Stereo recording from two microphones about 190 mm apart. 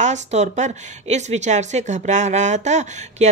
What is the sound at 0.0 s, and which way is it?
Speech, 35° right (ahead or behind).